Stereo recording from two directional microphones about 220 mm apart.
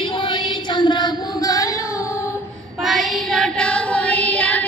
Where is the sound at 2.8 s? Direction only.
Centre (ahead or behind).